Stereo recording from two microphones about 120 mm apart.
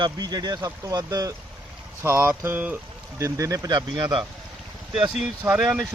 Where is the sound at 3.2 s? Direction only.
25° right (ahead or behind).